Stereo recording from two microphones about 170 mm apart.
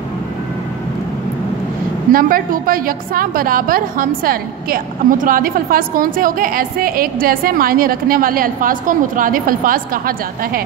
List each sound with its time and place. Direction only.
2.1 s a woman's voice: 55° right (ahead or behind)